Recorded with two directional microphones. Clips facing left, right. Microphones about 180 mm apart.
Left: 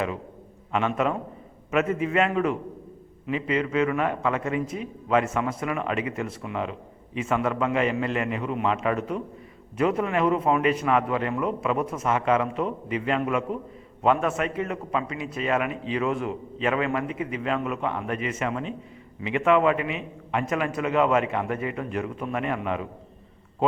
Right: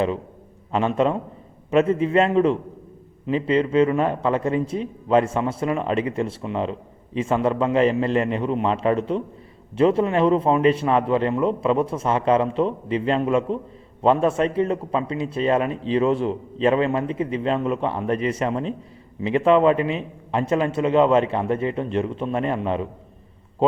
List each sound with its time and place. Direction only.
0.7 s a man's voice: 30° right (ahead or behind)